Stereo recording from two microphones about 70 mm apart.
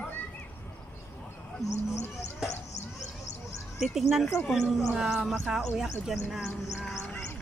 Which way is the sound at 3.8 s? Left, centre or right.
Centre.